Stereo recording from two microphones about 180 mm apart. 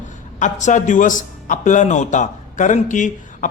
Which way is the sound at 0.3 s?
45° left (ahead or behind).